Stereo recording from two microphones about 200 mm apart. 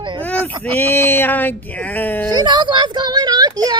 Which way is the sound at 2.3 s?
20° right (ahead or behind).